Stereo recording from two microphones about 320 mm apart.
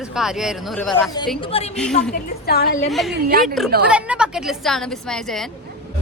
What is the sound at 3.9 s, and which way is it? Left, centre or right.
Speech, centre.